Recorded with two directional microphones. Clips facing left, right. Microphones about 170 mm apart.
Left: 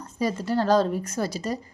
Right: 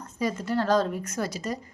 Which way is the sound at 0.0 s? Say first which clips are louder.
Left 2 dB; 35° left (ahead or behind).